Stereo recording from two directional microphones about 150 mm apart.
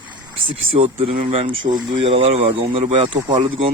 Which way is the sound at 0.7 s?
40° right (ahead or behind).